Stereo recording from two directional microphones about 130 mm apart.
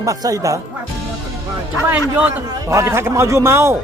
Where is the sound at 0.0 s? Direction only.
25° right (ahead or behind).